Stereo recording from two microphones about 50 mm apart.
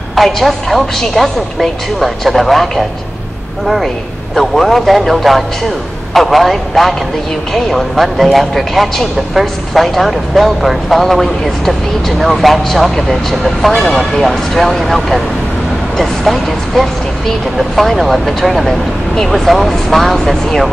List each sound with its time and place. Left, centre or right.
0.1 s a man's voice: centre
16.0 s a man's voice: centre